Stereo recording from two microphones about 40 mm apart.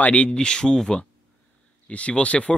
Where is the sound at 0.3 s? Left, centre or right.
Left.